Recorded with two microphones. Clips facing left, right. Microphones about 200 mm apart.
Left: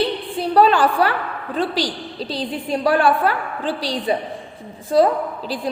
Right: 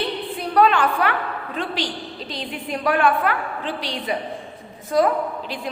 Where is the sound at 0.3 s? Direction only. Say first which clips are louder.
Left 3 dB; 30° left (ahead or behind).